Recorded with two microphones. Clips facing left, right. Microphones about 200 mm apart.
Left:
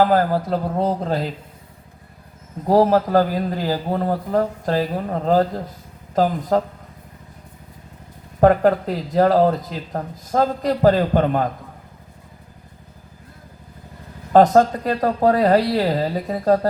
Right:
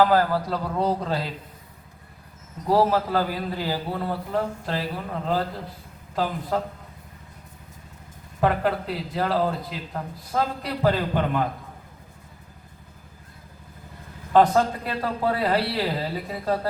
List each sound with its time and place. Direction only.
0.0 s a man's voice: 45° left (ahead or behind)
2.6 s a man's voice: 45° left (ahead or behind)
8.4 s a man's voice: 45° left (ahead or behind)
14.3 s a man's voice: 40° left (ahead or behind)